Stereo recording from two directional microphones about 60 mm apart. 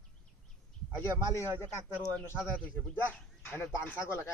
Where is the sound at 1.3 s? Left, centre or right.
Left.